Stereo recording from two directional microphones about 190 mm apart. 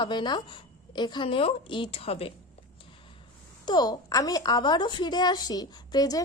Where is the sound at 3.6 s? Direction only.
20° left (ahead or behind).